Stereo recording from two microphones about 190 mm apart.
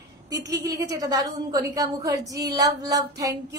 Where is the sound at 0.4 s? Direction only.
20° right (ahead or behind).